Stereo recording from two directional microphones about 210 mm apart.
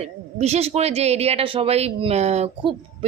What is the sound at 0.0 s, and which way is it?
A woman's voice, 30° right (ahead or behind).